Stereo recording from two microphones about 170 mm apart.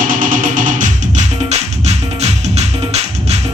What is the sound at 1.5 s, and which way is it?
Music, 40° right (ahead or behind).